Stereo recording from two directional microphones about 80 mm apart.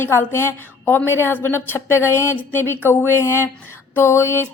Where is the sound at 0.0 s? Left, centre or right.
Left.